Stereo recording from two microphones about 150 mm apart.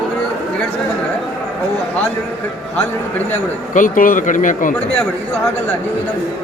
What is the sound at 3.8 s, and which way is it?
Speech, 65° left (ahead or behind).